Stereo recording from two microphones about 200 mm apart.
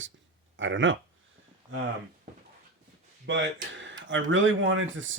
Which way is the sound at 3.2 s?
65° right (ahead or behind).